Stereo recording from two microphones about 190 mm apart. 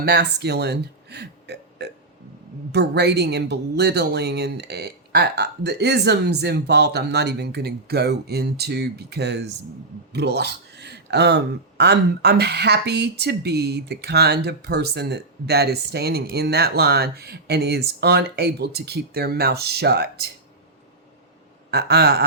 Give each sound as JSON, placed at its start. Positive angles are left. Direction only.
{"t": 0.0, "sound": "speech", "side_deg": -60}
{"t": 21.7, "sound": "speech", "side_deg": -60}